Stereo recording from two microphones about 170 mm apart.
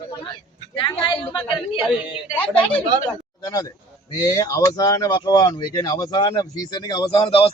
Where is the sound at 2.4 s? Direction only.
10° left (ahead or behind).